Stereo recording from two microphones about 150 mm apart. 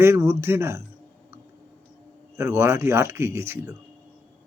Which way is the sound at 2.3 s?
20° right (ahead or behind).